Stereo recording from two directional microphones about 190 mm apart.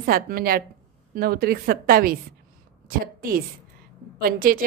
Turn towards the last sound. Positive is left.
turn(degrees=-50)  # may be behind; listen again after turning